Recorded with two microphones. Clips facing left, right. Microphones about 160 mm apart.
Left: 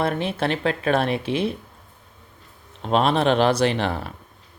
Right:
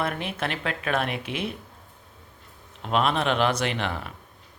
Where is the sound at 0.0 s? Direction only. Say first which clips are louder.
Left 6 dB; 30° left (ahead or behind).